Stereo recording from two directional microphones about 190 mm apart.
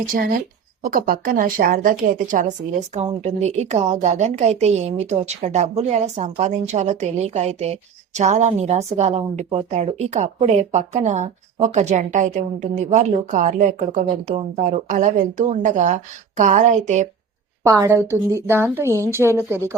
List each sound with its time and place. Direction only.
0.0 s a woman's voice: 45° right (ahead or behind)
17.6 s a woman's voice: 15° right (ahead or behind)